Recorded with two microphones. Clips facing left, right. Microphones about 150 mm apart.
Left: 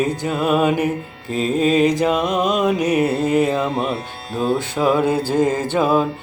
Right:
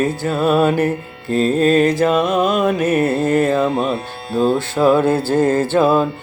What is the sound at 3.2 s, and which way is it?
Music, 50° right (ahead or behind).